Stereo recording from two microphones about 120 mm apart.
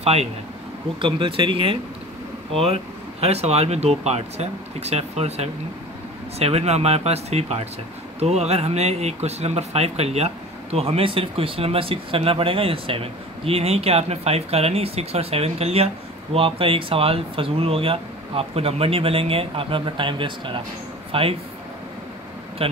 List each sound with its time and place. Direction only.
0.0 s speech: 60° right (ahead or behind)
1.0 s speech: 45° right (ahead or behind)
22.6 s speech: 50° right (ahead or behind)